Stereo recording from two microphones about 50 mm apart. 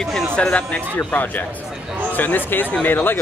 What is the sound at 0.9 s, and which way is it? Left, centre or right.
Speech, left.